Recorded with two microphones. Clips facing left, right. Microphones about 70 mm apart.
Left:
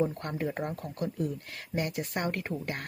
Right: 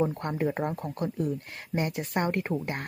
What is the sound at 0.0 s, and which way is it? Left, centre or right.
Speech, right.